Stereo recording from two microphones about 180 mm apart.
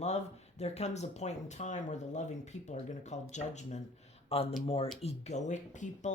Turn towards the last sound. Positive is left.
turn(degrees=40)  # may be behind; listen again after turning